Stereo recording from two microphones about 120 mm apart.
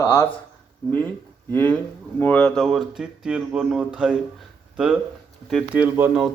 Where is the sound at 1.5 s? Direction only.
15° left (ahead or behind); by 4.1 s 10° right (ahead or behind).